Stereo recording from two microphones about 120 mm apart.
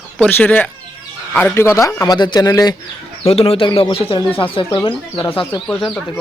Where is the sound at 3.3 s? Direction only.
50° left (ahead or behind).